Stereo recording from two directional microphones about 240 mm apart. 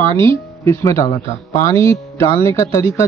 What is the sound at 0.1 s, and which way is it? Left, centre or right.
Speech, centre.